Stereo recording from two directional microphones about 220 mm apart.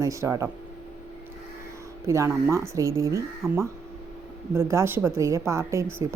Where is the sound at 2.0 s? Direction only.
15° right (ahead or behind).